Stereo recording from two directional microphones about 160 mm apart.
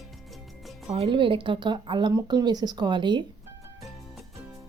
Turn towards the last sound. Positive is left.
turn(degrees=-30)  # may be behind; listen again after turning